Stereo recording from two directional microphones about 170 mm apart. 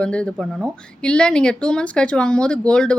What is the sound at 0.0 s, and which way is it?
Speech, 5° left (ahead or behind).